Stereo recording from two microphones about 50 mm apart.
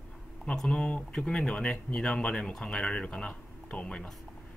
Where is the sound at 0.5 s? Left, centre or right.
Centre.